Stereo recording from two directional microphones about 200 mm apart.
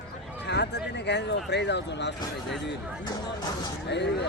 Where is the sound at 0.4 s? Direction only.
60° left (ahead or behind).